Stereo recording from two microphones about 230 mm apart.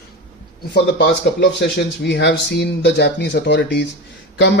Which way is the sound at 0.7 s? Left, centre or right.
Left.